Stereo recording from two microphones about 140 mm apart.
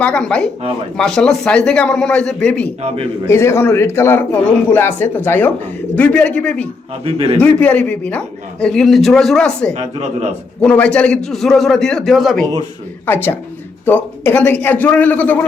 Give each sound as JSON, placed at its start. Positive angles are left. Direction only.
{"t": 0.0, "sound": "a man's voice", "side_deg": 5}
{"t": 2.8, "sound": "a woman's voice", "side_deg": -45}
{"t": 3.2, "sound": "a man's voice", "side_deg": 20}
{"t": 7.0, "sound": "a woman's voice", "side_deg": -45}
{"t": 7.4, "sound": "a man's voice", "side_deg": 10}
{"t": 9.7, "sound": "a woman's voice", "side_deg": -55}
{"t": 10.6, "sound": "a man's voice", "side_deg": 5}
{"t": 13.1, "sound": "a man's voice", "side_deg": 15}